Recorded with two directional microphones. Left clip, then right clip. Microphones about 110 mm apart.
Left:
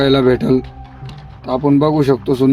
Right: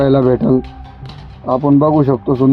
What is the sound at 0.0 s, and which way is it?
Speech, 5° right (ahead or behind).